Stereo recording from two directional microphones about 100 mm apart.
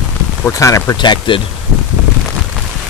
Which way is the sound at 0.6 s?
30° left (ahead or behind).